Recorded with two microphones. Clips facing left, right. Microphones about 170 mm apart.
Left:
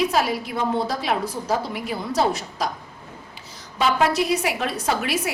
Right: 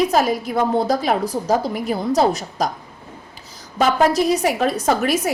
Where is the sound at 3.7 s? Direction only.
40° right (ahead or behind).